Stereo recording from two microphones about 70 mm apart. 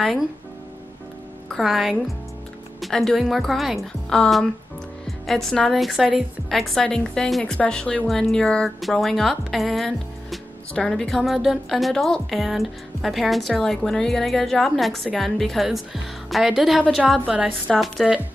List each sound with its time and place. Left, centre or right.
1.6 s speech: centre
7.5 s a woman's voice: centre